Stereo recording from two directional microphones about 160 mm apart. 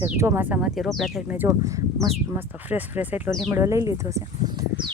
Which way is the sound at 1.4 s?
20° right (ahead or behind).